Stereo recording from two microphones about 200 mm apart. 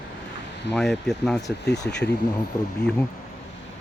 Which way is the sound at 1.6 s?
60° left (ahead or behind).